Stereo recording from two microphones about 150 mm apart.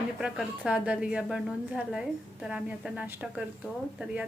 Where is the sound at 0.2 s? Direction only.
5° right (ahead or behind).